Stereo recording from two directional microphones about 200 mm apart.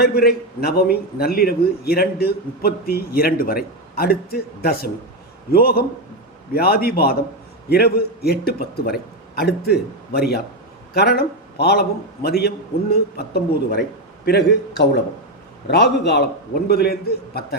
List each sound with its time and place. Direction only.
0.0 s a man's voice: 50° left (ahead or behind)